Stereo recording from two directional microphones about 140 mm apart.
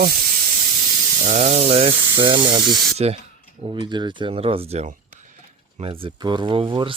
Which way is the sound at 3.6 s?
35° right (ahead or behind).